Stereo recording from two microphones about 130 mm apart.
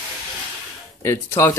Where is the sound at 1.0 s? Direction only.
20° left (ahead or behind).